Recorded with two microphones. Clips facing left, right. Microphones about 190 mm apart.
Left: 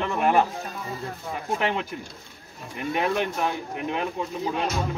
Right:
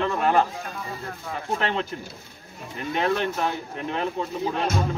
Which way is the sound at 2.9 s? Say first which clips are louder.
Right 1 dB; 10° left (ahead or behind).